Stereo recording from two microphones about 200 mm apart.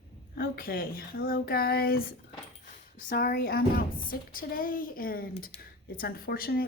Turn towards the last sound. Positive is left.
turn(degrees=50)  # may be behind; listen again after turning